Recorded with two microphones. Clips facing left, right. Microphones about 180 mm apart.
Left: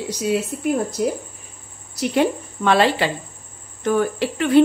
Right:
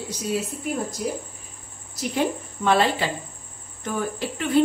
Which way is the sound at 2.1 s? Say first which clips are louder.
Left 5 dB; 75° left (ahead or behind).